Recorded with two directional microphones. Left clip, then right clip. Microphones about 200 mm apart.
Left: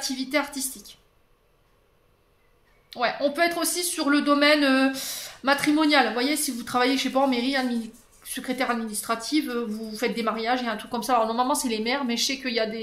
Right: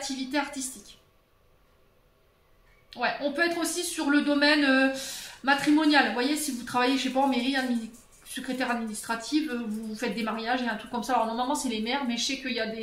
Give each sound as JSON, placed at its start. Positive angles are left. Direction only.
{"t": 0.3, "sound": "speech", "side_deg": 50}
{"t": 2.9, "sound": "speech", "side_deg": 50}